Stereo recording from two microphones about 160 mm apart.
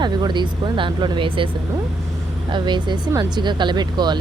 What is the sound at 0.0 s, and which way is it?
Speech, 30° right (ahead or behind).